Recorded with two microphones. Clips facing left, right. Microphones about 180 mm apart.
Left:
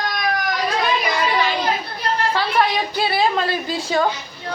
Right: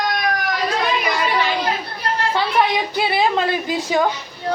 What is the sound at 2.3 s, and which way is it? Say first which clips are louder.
A woman's voice: right 2 dB; 20° right (ahead or behind).